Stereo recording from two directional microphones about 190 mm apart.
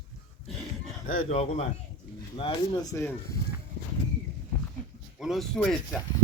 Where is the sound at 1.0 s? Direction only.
35° left (ahead or behind).